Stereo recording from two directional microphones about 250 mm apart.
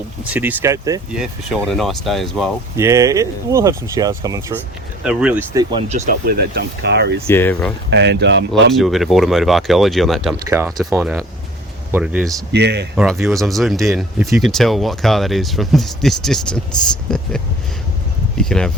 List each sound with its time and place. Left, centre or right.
0.3 s speech: centre
1.1 s speech: centre
2.7 s speech: centre
6.1 s speech: right
7.3 s speech: centre
7.9 s speech: right
8.7 s speech: centre
12.5 s speech: right
13.2 s speech: centre
18.3 s speech: centre